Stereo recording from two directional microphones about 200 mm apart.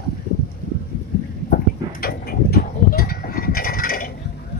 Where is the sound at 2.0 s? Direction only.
50° left (ahead or behind).